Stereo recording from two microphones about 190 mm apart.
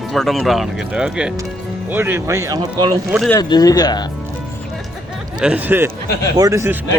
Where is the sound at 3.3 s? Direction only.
20° left (ahead or behind).